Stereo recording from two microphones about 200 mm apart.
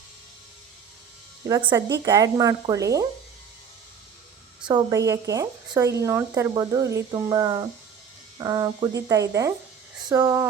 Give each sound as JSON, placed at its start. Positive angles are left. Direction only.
{"t": 1.5, "sound": "speech", "side_deg": -15}
{"t": 4.7, "sound": "speech", "side_deg": -15}